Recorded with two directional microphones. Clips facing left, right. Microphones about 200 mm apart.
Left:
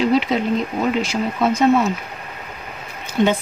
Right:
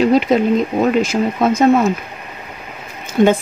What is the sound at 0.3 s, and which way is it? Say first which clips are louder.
Speech: right 6 dB; 45° right (ahead or behind).